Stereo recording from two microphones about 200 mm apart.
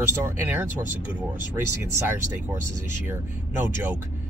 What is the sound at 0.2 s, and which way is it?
Speech, 10° right (ahead or behind).